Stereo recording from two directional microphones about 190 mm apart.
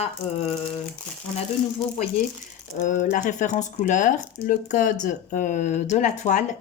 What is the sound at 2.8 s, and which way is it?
Speech, 40° left (ahead or behind).